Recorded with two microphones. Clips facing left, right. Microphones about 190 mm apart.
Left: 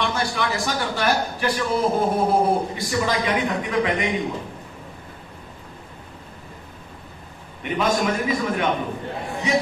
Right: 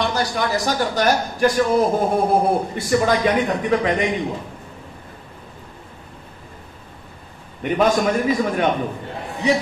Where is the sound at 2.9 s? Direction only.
50° right (ahead or behind).